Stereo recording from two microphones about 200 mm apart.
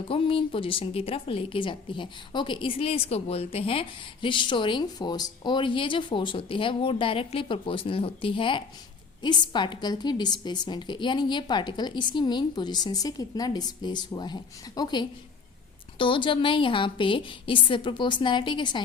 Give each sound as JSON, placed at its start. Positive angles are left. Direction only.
{"t": 0.1, "sound": "a woman's voice", "side_deg": 25}